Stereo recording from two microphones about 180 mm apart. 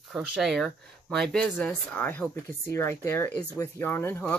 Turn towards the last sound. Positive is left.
turn(degrees=15)  # may be behind; listen again after turning